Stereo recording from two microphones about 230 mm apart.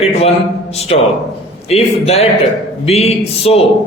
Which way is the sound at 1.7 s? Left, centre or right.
Left.